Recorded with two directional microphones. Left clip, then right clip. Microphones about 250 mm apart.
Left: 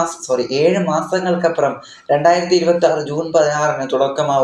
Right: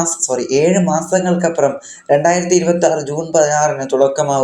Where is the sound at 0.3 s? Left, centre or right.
Right.